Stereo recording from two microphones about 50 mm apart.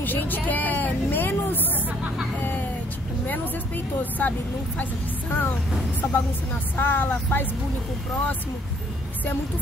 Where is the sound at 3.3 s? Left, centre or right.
Left.